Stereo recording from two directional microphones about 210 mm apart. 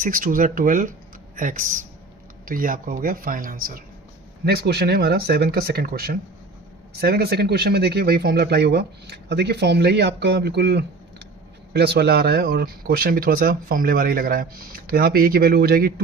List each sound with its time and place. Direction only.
0.0 s speech: 40° right (ahead or behind)